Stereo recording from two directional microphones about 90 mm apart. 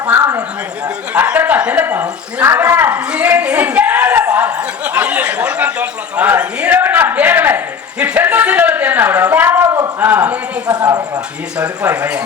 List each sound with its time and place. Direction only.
0.2 s a sound: 35° right (ahead or behind)
1.1 s speech: 20° right (ahead or behind)
10.0 s speech: 20° right (ahead or behind)
11.5 s speech: 15° right (ahead or behind)